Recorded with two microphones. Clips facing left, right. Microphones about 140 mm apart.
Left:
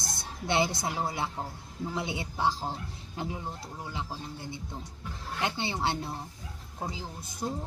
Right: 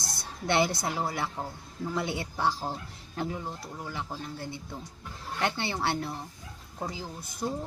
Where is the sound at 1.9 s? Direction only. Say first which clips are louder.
Right 3 dB; 15° left (ahead or behind).